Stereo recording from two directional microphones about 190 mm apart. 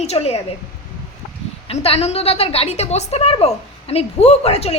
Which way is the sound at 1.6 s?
30° left (ahead or behind).